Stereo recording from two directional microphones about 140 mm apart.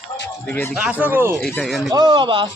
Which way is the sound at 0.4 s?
15° left (ahead or behind).